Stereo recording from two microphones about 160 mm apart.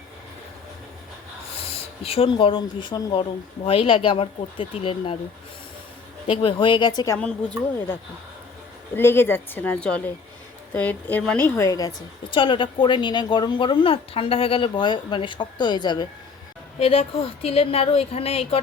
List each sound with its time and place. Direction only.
1.6 s speech: 40° left (ahead or behind)
6.2 s speech: 35° left (ahead or behind)
9.0 s speech: 15° left (ahead or behind)
12.3 s speech: 30° left (ahead or behind)
16.7 s speech: 40° left (ahead or behind)